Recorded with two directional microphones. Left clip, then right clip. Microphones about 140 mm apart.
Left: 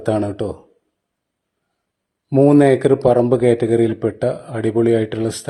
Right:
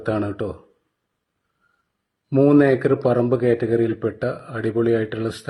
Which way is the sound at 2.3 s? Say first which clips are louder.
Left 3 dB; 40° left (ahead or behind).